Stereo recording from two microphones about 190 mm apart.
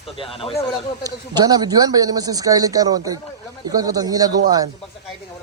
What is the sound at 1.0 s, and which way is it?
Speech, 20° right (ahead or behind).